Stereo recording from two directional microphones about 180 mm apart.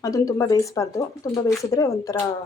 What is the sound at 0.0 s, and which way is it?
Speech, 20° left (ahead or behind).